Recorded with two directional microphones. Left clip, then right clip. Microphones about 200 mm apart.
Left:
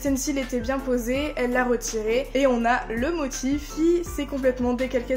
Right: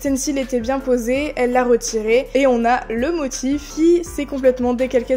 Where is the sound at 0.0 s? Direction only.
35° right (ahead or behind).